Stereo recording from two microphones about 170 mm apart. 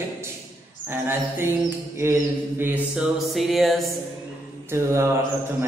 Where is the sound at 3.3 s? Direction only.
Centre (ahead or behind).